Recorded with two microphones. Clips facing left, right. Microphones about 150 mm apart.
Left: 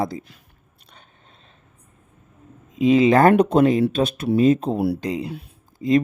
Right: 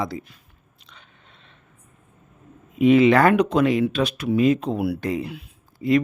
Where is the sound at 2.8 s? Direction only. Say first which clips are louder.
Left 1 dB; 35° left (ahead or behind).